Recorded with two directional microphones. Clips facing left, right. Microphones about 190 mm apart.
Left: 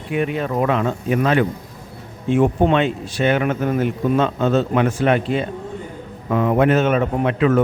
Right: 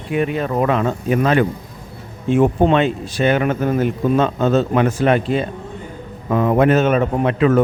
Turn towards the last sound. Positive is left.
turn(degrees=-40)  # may be behind; listen again after turning